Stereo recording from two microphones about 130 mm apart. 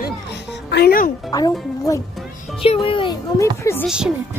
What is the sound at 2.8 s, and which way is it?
Speech, 40° left (ahead or behind).